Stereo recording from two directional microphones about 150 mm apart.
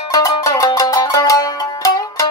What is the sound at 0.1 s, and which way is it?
Music, 20° left (ahead or behind).